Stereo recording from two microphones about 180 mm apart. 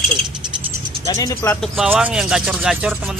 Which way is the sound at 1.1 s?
20° left (ahead or behind).